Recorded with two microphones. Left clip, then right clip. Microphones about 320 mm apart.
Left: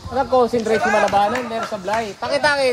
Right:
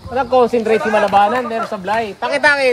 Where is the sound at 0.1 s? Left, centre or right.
Right.